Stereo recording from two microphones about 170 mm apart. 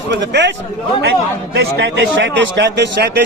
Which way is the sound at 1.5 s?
90° right.